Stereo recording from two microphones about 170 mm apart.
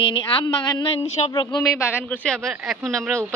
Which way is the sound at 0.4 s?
30° left (ahead or behind).